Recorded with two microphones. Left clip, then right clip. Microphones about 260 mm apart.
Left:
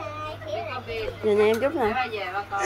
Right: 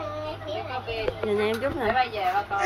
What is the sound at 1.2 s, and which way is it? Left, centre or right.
Speech, centre.